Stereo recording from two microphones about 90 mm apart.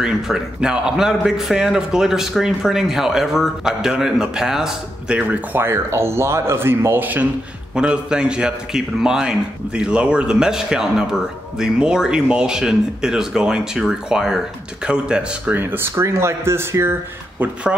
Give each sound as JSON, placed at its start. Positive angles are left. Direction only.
{"t": 0.0, "sound": "a man's voice", "side_deg": -10}
{"t": 7.7, "sound": "a man's voice", "side_deg": -10}
{"t": 15.5, "sound": "speech", "side_deg": -25}